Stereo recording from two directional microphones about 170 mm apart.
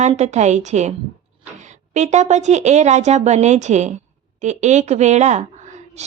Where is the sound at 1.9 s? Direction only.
45° right (ahead or behind).